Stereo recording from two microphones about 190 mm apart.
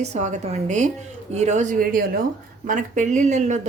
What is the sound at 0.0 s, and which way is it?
A woman's voice, 35° right (ahead or behind).